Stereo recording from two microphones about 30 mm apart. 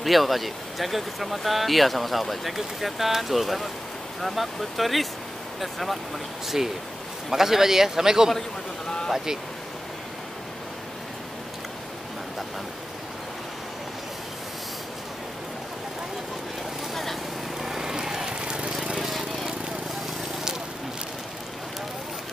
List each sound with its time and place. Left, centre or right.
0.0 s speech: centre
7.2 s a man's voice: centre
16.9 s vehicle: centre
17.6 s vehicle: centre
18.9 s a sound: centre